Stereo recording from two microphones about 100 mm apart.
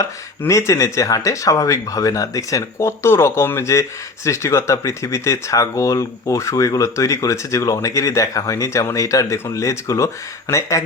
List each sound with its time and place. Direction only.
0.0 s speech: 30° left (ahead or behind)